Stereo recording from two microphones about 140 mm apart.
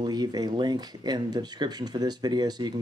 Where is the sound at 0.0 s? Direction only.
30° right (ahead or behind).